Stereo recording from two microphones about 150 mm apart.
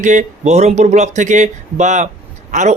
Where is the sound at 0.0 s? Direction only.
55° right (ahead or behind).